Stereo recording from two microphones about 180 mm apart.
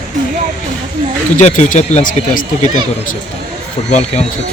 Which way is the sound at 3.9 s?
40° left (ahead or behind).